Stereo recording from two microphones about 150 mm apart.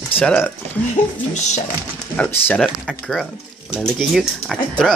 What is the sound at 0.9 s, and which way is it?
Speech, 50° left (ahead or behind).